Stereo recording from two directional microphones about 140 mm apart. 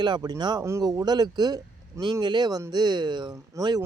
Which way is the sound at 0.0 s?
30° right (ahead or behind).